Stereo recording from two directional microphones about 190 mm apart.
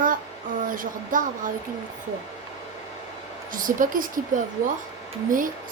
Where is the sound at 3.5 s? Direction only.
45° right (ahead or behind).